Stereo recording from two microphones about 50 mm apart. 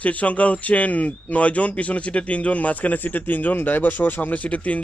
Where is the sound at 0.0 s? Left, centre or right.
Left.